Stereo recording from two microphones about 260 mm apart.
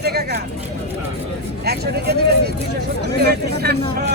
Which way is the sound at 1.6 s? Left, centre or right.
Right.